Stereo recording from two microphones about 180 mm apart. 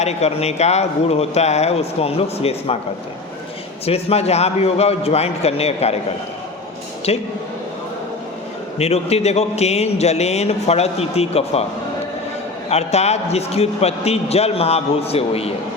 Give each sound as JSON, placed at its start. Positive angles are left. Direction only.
{"t": 0.0, "sound": "a man's voice", "side_deg": 35}
{"t": 3.8, "sound": "a man's voice", "side_deg": 35}
{"t": 7.1, "sound": "a man's voice", "side_deg": 35}
{"t": 8.8, "sound": "a man's voice", "side_deg": 35}
{"t": 12.7, "sound": "a man's voice", "side_deg": 35}